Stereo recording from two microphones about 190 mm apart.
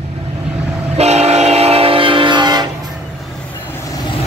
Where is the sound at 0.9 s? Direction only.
35° right (ahead or behind).